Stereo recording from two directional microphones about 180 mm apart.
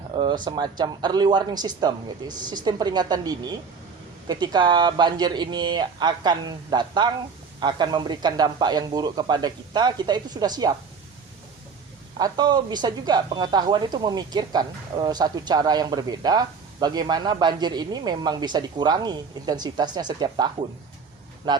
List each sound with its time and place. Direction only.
0.1 s a sound: 25° right (ahead or behind)
0.4 s speech: 25° right (ahead or behind)
12.2 s speech: 25° right (ahead or behind)